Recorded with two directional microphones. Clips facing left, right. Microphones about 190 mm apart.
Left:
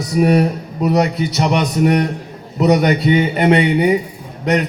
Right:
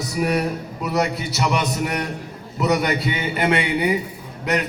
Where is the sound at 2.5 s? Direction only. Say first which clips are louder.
Left 7 dB; 25° left (ahead or behind).